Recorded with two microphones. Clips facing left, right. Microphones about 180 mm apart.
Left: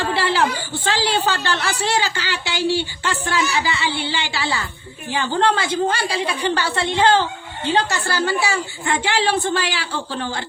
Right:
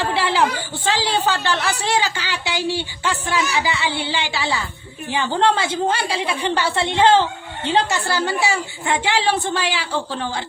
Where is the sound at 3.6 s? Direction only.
15° right (ahead or behind).